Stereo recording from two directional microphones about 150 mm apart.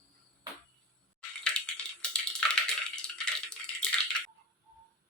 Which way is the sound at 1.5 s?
5° left (ahead or behind).